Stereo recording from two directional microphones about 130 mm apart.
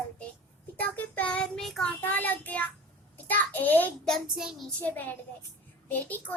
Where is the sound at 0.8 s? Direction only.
10° left (ahead or behind).